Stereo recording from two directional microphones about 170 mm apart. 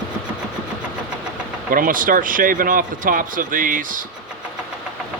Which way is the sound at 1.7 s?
55° right (ahead or behind).